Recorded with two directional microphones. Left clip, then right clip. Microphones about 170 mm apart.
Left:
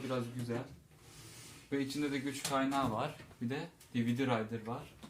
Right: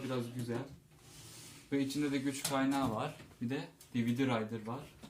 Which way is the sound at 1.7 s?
10° left (ahead or behind).